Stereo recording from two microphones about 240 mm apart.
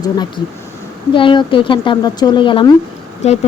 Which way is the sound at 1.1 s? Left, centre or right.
Centre.